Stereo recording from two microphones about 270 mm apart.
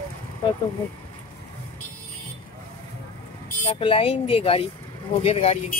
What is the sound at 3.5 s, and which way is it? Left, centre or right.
Speech, left.